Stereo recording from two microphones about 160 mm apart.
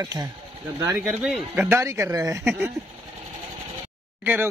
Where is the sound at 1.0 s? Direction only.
5° right (ahead or behind).